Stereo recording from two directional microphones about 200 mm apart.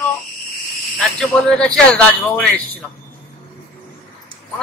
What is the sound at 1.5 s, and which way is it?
A man's voice, 5° left (ahead or behind).